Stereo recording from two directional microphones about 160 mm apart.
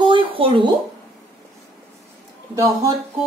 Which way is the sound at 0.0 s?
30° right (ahead or behind).